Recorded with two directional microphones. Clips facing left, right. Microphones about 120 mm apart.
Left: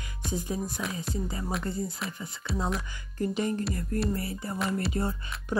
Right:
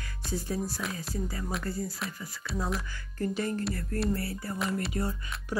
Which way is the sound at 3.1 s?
20° left (ahead or behind).